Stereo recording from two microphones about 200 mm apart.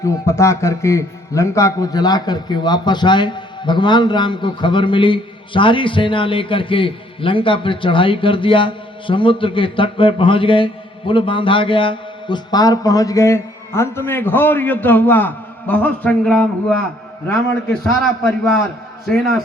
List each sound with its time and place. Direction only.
0.0 s a man's voice: 15° left (ahead or behind)